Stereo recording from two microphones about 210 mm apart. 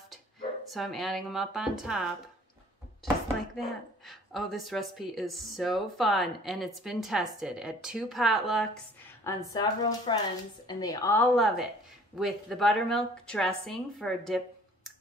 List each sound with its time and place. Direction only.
0.7 s speech: centre (ahead or behind)
3.5 s speech: centre (ahead or behind)
9.2 s speech: 15° left (ahead or behind)
11.3 s speech: centre (ahead or behind)